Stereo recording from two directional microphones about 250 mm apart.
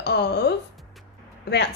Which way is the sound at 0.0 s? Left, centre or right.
Left.